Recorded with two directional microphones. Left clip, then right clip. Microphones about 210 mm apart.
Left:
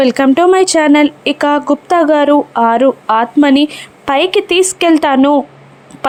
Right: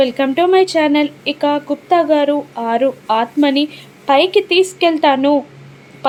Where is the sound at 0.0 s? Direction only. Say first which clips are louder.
Left 5 dB; 40° left (ahead or behind).